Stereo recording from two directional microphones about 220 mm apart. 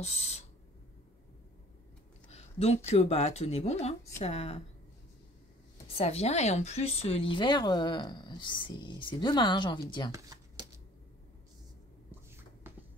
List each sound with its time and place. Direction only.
0.0 s a sound: 30° left (ahead or behind)
2.2 s speech: 30° left (ahead or behind)
5.9 s speech: 25° left (ahead or behind)
10.1 s shuffling cards: 20° right (ahead or behind)